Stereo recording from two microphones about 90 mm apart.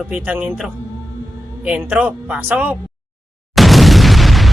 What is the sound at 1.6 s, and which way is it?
Speech, 15° right (ahead or behind).